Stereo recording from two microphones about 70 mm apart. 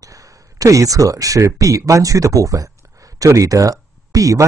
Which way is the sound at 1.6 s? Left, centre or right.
Right.